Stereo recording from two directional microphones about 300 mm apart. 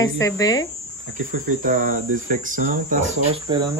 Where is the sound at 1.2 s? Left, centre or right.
Right.